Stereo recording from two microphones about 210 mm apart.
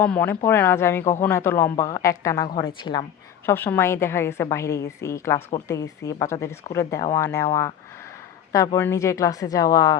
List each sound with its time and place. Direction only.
0.0 s a woman's voice: 10° left (ahead or behind)